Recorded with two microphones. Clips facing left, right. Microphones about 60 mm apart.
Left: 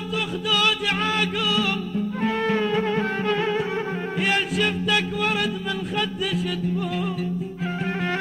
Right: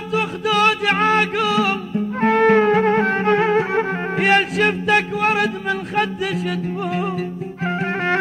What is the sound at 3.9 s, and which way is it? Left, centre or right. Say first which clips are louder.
Music: right 7 dB; right.